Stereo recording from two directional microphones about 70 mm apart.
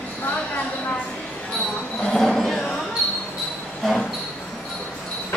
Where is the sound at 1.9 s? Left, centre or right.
Centre.